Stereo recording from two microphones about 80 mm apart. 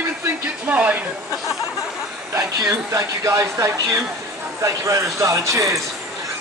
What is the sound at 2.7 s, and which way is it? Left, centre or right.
Speech, right.